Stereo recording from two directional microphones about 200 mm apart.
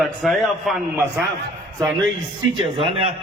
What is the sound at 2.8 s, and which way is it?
Speech, 30° right (ahead or behind).